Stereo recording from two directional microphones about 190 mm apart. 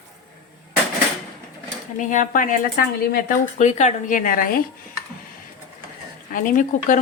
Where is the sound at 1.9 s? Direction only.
45° left (ahead or behind).